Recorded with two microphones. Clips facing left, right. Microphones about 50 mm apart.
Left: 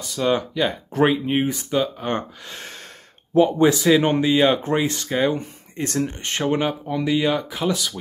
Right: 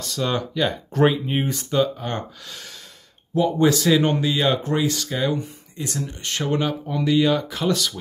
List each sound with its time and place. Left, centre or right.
0.0 s speech: centre; by 2.7 s left
3.5 s speech: centre; by 6.1 s left
6.4 s speech: centre